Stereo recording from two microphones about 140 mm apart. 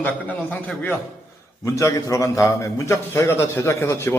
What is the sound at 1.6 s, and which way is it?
A man's voice, 20° left (ahead or behind).